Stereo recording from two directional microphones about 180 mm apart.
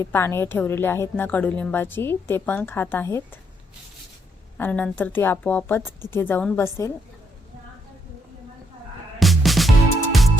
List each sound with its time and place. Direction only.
0.0 s a woman's voice: 10° left (ahead or behind)
4.5 s a woman's voice: 10° left (ahead or behind)
9.1 s music: centre (ahead or behind)